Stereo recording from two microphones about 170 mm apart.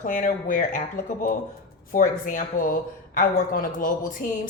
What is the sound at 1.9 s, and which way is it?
Speech, 55° left (ahead or behind).